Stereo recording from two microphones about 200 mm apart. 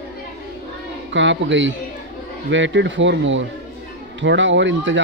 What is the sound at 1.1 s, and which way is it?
Speech, 65° right (ahead or behind).